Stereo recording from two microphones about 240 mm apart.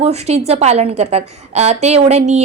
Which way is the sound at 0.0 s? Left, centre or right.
Right.